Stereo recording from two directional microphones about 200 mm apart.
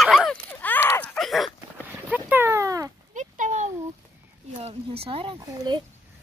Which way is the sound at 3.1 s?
40° right (ahead or behind).